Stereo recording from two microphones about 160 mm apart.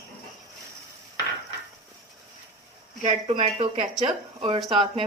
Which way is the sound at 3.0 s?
40° right (ahead or behind).